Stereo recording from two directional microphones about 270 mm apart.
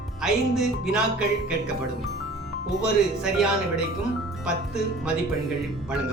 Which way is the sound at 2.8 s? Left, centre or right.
Centre.